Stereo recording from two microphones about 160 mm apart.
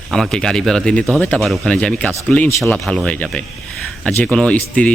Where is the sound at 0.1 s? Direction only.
5° left (ahead or behind).